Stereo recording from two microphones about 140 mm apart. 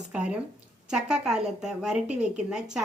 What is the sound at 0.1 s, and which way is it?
A woman's voice, 5° right (ahead or behind).